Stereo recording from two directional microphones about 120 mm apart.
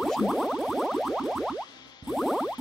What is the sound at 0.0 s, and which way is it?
Music, centre (ahead or behind).